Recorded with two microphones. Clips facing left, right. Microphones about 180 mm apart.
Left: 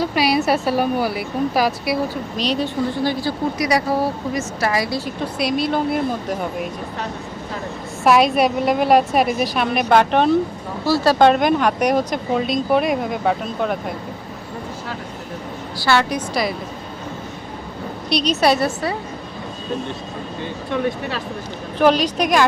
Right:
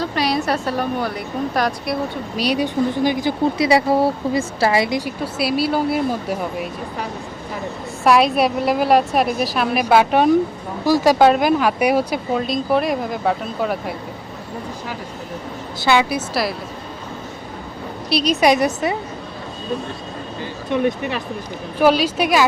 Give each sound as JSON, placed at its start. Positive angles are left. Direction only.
{"t": 0.0, "sound": "a woman's voice", "side_deg": 10}
{"t": 2.3, "sound": "speech", "side_deg": -10}
{"t": 11.3, "sound": "speech", "side_deg": -5}
{"t": 15.8, "sound": "speech", "side_deg": -15}
{"t": 18.1, "sound": "speech", "side_deg": -10}
{"t": 20.7, "sound": "speech", "side_deg": -15}